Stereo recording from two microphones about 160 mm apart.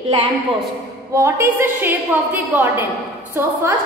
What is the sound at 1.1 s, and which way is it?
Speech, 15° right (ahead or behind).